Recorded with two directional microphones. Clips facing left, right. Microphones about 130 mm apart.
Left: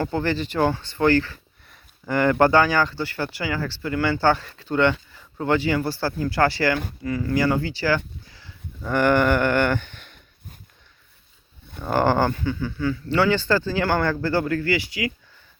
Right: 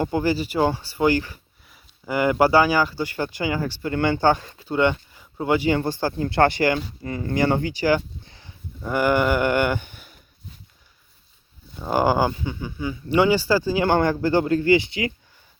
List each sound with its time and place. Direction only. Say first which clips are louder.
0.0 s speech: right 2 dB; 15° right (ahead or behind)
11.8 s speech: even; 10° right (ahead or behind)